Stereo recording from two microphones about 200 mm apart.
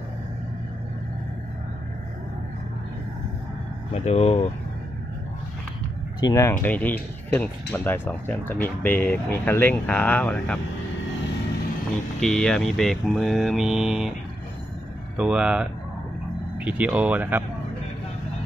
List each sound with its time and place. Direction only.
3.9 s speech: 30° left (ahead or behind)
6.2 s speech: 15° left (ahead or behind)
12.2 s mantra: 5° left (ahead or behind)
15.1 s mantra: 5° right (ahead or behind)
16.5 s speech: 5° right (ahead or behind)